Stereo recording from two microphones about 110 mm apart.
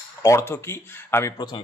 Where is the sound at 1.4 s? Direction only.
45° left (ahead or behind).